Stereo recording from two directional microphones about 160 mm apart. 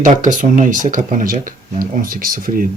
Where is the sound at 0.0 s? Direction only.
55° right (ahead or behind).